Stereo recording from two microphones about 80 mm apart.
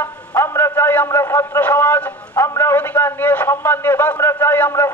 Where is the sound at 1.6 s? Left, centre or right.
Left.